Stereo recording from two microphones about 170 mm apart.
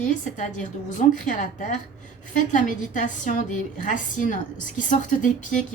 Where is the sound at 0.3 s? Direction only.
50° left (ahead or behind).